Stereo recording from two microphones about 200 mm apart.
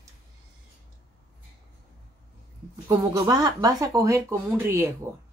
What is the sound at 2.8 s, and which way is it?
Speech, 15° right (ahead or behind).